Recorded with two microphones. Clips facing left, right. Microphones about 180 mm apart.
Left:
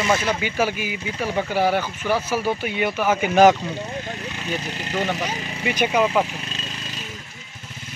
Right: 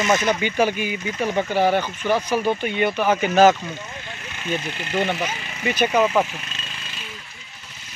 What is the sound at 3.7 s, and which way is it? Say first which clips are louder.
Vehicle: left 5 dB; 35° left (ahead or behind).